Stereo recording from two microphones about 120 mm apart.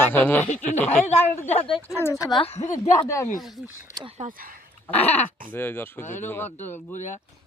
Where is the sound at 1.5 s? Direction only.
50° left (ahead or behind).